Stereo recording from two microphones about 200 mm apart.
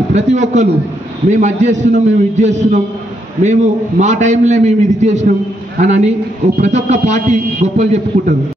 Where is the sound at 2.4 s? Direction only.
35° right (ahead or behind).